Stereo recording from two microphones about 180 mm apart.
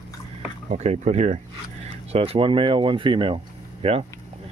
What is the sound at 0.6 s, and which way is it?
Speech, 40° right (ahead or behind).